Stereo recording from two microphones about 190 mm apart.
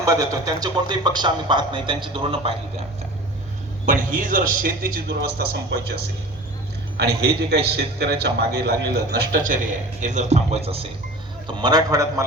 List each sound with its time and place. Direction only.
0.0 s speech: 20° right (ahead or behind)
3.8 s a man's voice: 45° right (ahead or behind)
6.9 s a man's voice: 60° right (ahead or behind)
10.0 s a man's voice: 40° right (ahead or behind)
11.4 s speech: 20° right (ahead or behind)